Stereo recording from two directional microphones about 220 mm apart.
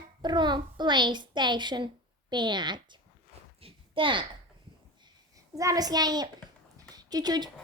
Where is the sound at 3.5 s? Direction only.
25° right (ahead or behind).